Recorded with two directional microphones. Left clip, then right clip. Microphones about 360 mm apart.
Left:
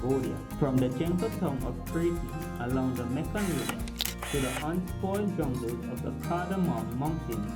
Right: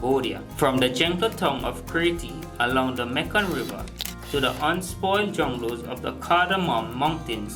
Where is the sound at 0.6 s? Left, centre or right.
Centre.